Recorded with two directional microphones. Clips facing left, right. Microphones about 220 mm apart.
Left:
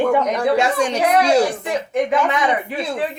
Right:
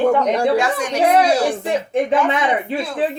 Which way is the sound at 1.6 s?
30° right (ahead or behind).